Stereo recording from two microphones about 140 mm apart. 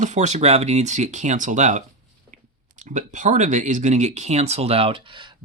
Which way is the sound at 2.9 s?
65° right (ahead or behind).